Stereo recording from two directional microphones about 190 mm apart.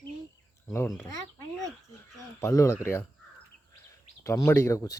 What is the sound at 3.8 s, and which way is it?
Bird, 15° left (ahead or behind).